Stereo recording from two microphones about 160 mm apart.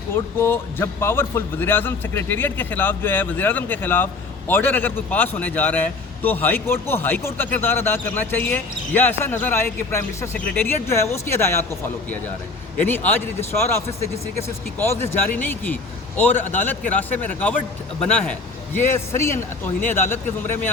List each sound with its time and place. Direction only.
0.1 s a man's voice: 15° left (ahead or behind)
12.7 s a man's voice: 10° left (ahead or behind)
15.3 s a man's voice: 10° left (ahead or behind)